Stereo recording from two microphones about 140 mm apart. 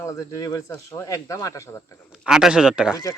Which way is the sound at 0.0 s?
25° left (ahead or behind).